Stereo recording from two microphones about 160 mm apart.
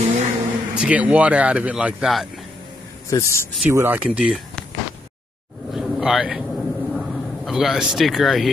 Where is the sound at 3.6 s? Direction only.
10° right (ahead or behind).